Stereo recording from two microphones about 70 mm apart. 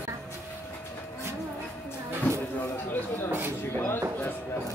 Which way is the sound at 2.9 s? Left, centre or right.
Left.